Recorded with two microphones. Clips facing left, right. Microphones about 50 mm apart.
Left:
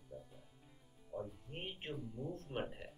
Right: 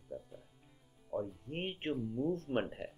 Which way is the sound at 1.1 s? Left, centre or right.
Right.